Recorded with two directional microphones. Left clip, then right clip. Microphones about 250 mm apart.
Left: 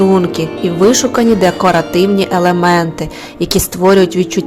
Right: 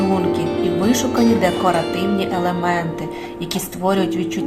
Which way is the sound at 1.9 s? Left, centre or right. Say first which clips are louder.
Left 8 dB; left.